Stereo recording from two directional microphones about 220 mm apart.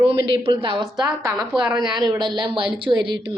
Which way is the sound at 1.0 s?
Centre (ahead or behind).